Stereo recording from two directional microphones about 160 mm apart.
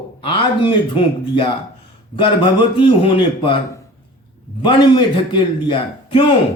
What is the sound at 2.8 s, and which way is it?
Speech, 30° left (ahead or behind).